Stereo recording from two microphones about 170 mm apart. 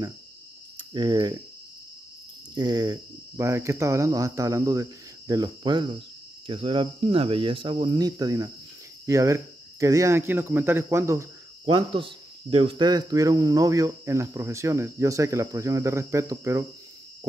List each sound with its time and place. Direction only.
0.9 s speech: 25° right (ahead or behind)
2.5 s speech: 25° right (ahead or behind)
11.6 s speech: 30° right (ahead or behind)